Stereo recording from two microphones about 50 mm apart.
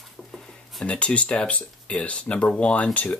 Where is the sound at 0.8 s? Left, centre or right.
Left.